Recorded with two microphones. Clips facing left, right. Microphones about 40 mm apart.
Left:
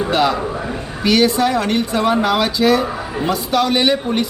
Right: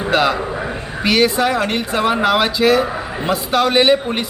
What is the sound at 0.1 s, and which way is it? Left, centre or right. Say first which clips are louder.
A man's voice: right 4 dB; centre.